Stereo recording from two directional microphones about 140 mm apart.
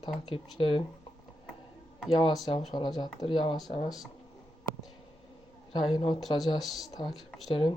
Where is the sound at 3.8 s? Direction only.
Centre (ahead or behind).